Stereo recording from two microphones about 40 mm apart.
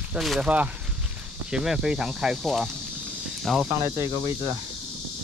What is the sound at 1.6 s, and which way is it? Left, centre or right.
Speech, centre.